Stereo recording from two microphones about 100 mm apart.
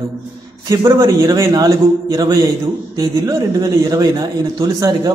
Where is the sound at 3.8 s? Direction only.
35° right (ahead or behind).